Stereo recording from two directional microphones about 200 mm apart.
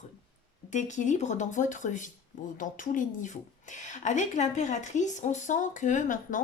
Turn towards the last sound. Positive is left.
turn(degrees=40)  # may be behind; listen again after turning